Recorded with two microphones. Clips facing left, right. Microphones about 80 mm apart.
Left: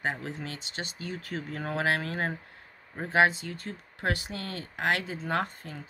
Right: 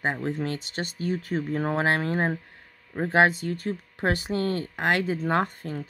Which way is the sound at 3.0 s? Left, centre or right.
Right.